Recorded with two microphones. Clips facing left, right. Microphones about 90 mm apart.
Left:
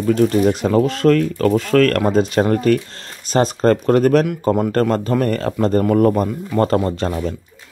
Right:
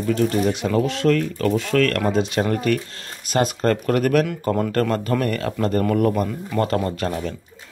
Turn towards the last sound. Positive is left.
turn(degrees=30)  # may be behind; listen again after turning